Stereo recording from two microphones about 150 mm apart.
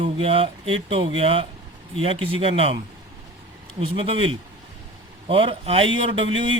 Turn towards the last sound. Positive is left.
turn(degrees=-35)  # may be behind; listen again after turning